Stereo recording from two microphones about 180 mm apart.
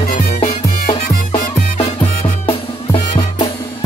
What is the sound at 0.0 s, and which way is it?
Music, 55° left (ahead or behind).